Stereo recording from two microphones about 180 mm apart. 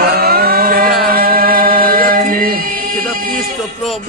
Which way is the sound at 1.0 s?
55° right (ahead or behind).